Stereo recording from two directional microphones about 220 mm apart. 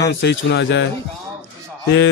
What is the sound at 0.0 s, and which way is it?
Speech, 50° left (ahead or behind).